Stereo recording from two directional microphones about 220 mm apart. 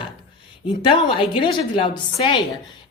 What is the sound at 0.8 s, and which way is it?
Speech, 25° left (ahead or behind).